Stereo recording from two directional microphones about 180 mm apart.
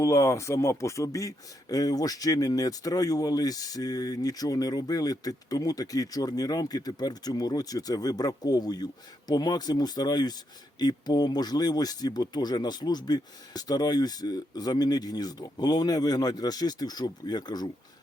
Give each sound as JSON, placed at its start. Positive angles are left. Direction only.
{"t": 0.0, "sound": "speech", "side_deg": 15}